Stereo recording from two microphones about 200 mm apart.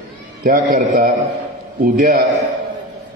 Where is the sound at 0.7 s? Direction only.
40° right (ahead or behind).